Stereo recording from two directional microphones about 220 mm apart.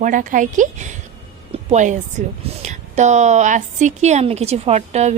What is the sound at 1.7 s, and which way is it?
Speech, 35° right (ahead or behind).